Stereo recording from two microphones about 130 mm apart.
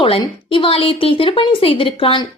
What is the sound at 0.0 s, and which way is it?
A woman's voice, 40° left (ahead or behind).